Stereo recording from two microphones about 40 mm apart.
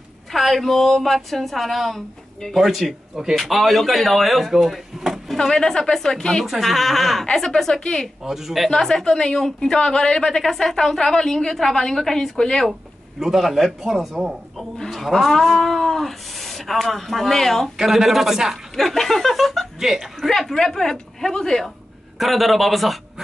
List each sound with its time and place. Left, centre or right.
0.3 s speech: centre
5.4 s a woman's voice: centre
6.4 s a woman's voice: centre
8.2 s speech: centre
8.6 s a woman's voice: centre
10.5 s a woman's voice: centre
13.2 s speech: centre
17.7 s speech: centre
18.8 s speech: centre
19.8 s speech: centre
20.2 s a woman's voice: centre
22.2 s speech: centre